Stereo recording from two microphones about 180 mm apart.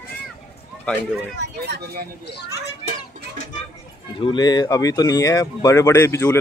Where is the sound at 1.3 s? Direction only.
65° right (ahead or behind).